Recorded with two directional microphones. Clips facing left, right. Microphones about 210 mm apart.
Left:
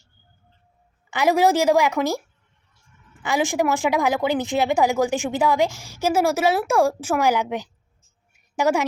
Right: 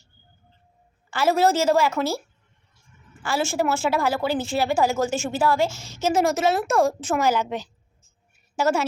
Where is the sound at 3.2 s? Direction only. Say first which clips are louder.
Left 2 dB; 15° left (ahead or behind).